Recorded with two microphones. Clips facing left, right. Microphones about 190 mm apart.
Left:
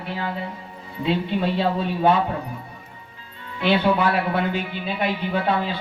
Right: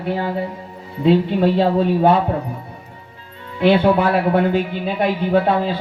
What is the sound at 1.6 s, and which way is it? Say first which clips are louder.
Speech: right 6 dB; 45° right (ahead or behind).